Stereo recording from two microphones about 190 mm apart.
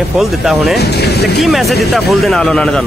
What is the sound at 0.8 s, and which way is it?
Speech, 60° left (ahead or behind).